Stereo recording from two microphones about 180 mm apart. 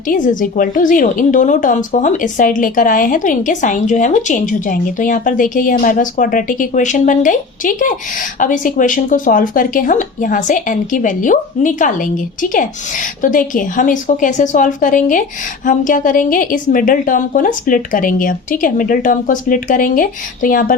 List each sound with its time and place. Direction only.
0.1 s a woman's voice: 45° left (ahead or behind)